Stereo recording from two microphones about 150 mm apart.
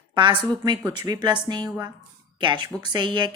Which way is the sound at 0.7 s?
25° right (ahead or behind).